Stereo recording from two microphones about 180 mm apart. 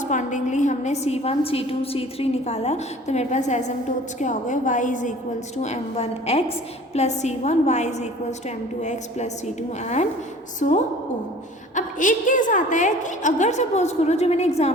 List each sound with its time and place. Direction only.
0.0 s a woman's voice: 45° left (ahead or behind)